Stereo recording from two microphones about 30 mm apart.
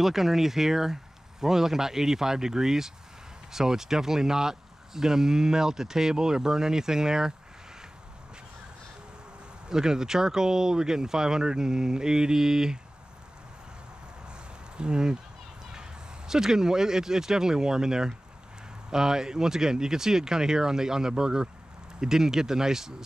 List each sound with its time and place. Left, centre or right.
0.0 s speech: centre
9.7 s speech: right
14.8 s speech: right